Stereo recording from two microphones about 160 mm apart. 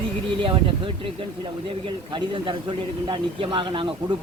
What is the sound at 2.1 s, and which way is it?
Speech, 30° right (ahead or behind).